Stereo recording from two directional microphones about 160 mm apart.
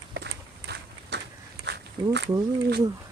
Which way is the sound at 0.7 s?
90° right.